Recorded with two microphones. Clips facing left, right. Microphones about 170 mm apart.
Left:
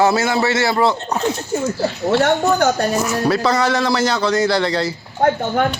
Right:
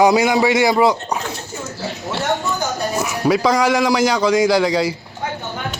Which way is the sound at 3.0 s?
10° right (ahead or behind).